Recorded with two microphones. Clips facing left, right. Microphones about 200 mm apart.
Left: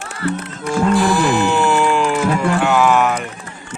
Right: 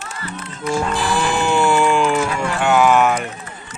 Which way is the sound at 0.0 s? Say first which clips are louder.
Left 8 dB; 50° left (ahead or behind).